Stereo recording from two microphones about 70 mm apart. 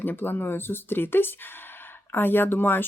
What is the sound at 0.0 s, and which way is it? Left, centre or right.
Speech, left.